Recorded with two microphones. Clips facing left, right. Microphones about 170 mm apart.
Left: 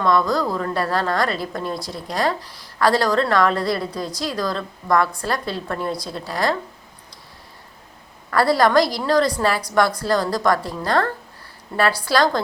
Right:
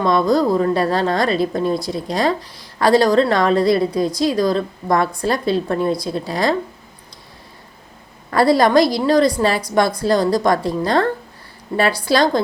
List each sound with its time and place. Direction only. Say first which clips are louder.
0.0 s a woman's voice: right 4 dB; 20° right (ahead or behind)
8.3 s a woman's voice: right 3 dB; 20° right (ahead or behind)